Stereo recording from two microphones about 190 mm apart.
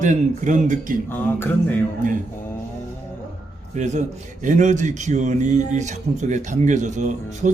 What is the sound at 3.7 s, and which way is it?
A man's voice, 40° right (ahead or behind).